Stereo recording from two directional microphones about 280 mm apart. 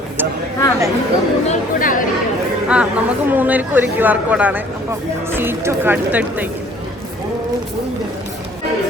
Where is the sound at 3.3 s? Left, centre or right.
Centre.